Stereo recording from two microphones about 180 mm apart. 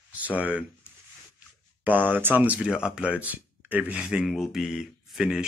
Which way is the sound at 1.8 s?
10° right (ahead or behind).